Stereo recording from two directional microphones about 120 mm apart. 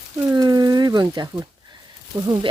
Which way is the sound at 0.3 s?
30° right (ahead or behind).